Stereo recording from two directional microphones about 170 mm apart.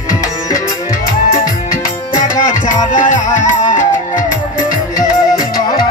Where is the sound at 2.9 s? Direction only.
50° left (ahead or behind).